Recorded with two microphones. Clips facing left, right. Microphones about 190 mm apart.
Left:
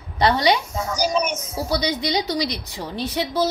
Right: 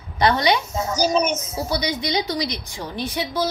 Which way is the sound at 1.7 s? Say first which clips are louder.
Left 1 dB; 35° left (ahead or behind).